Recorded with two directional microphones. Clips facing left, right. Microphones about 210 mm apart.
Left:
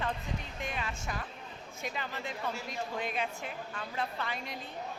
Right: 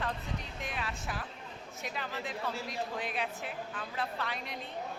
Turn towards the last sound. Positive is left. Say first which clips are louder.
# even
turn(degrees=0)  # may be behind; listen again after turning